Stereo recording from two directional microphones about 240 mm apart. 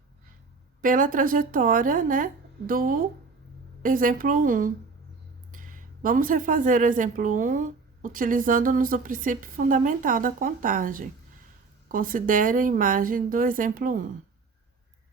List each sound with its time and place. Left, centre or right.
0.8 s a woman's voice: right